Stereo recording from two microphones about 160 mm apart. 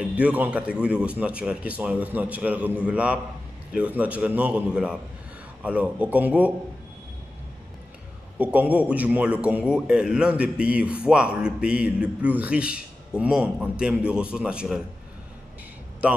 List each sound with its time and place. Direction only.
0.1 s a man's voice: 10° right (ahead or behind)
8.4 s a man's voice: 10° right (ahead or behind)
16.0 s a man's voice: 10° right (ahead or behind)